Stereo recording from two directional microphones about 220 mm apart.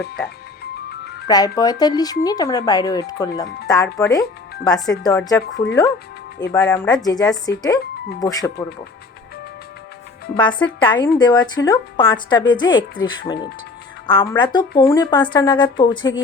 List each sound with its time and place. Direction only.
1.3 s a woman's voice: 15° left (ahead or behind)
6.5 s a woman's voice: 15° left (ahead or behind)
10.3 s a woman's voice: 20° left (ahead or behind)